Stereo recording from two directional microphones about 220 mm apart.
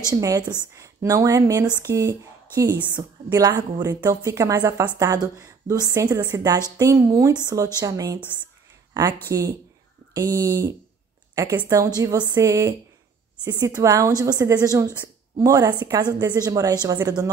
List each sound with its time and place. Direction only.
0.1 s a woman's voice: 15° right (ahead or behind)
9.3 s a woman's voice: 15° right (ahead or behind)